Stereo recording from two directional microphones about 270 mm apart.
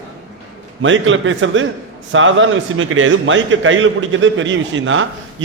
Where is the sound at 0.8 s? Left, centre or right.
Right.